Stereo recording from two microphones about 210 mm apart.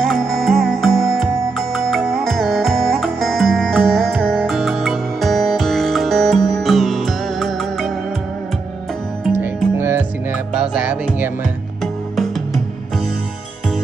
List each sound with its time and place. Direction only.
0.0 s music: centre (ahead or behind)
9.2 s music: 10° right (ahead or behind)